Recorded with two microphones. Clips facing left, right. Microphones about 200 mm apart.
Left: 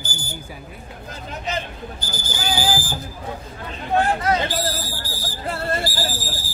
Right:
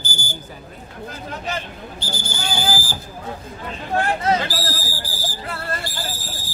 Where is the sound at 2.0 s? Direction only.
30° right (ahead or behind).